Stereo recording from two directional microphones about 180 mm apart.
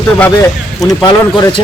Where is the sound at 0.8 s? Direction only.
25° left (ahead or behind).